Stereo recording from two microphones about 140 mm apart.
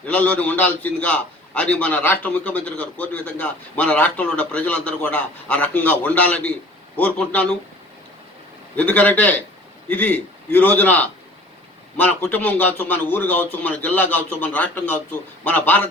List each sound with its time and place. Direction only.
0.0 s a man's voice: 10° left (ahead or behind)
8.7 s a man's voice: 10° left (ahead or behind)